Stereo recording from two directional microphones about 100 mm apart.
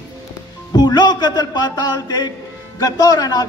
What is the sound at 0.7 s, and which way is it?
A man's voice, 45° left (ahead or behind).